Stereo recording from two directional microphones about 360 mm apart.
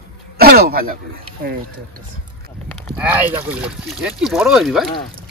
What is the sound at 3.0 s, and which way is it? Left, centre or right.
Speech, centre.